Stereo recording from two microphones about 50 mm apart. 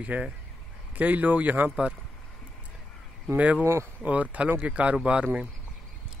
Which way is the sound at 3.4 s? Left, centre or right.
Right.